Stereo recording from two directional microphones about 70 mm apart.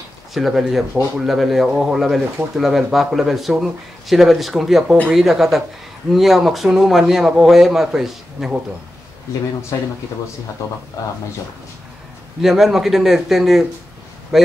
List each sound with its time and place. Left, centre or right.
0.3 s speech: centre
9.7 s speech: left
12.4 s speech: centre